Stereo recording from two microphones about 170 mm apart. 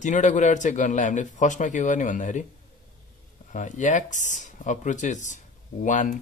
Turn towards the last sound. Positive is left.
turn(degrees=45)  # may be behind; listen again after turning